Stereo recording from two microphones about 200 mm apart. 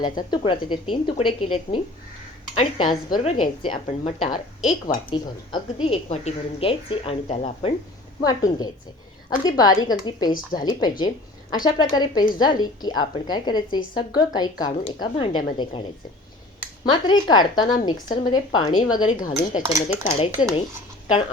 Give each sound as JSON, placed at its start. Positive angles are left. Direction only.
{"t": 0.0, "sound": "a woman's voice", "side_deg": 20}
{"t": 2.6, "sound": "a woman's voice", "side_deg": 25}
{"t": 8.2, "sound": "a woman's voice", "side_deg": 20}
{"t": 16.9, "sound": "a woman's voice", "side_deg": 20}
{"t": 19.7, "sound": "speech", "side_deg": 30}